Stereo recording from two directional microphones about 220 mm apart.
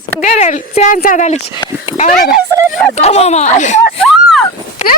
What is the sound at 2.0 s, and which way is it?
Speech, 35° left (ahead or behind).